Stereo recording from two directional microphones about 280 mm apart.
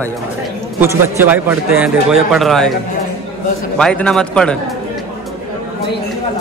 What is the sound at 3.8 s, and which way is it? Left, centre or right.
Speech, centre.